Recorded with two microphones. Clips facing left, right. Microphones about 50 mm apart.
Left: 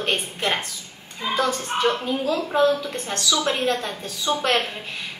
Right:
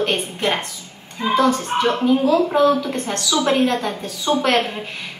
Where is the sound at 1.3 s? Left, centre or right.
Right.